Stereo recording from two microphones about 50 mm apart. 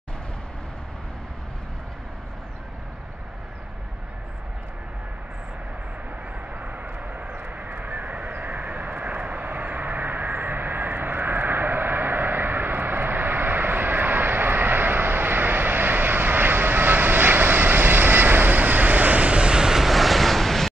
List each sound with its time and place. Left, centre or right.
6.6 s vehicle: right; by 20.7 s centre